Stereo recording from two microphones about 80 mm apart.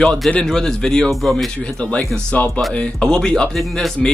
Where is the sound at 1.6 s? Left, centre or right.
Centre.